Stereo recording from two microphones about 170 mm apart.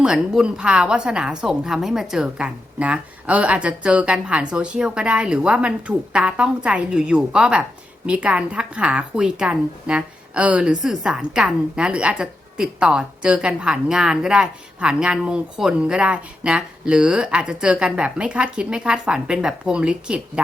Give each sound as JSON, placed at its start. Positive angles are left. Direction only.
{"t": 0.0, "sound": "a woman's voice", "side_deg": -5}